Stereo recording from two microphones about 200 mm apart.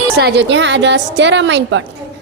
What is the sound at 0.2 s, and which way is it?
A woman's voice, 55° right (ahead or behind).